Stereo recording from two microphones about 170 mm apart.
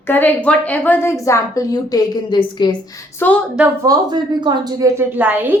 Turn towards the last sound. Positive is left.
turn(degrees=-10)  # may be behind; listen again after turning